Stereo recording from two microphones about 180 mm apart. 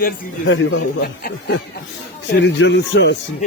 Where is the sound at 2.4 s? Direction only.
80° left.